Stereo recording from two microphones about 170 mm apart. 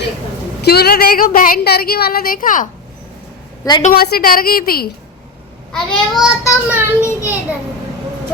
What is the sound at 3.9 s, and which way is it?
Speech, 65° left (ahead or behind).